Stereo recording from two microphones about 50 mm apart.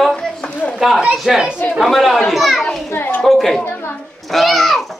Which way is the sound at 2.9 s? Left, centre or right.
Left.